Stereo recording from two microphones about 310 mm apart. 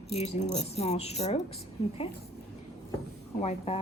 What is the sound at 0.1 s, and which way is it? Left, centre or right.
Speech, left.